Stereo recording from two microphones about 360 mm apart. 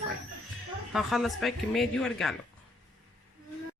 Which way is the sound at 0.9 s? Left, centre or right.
Centre.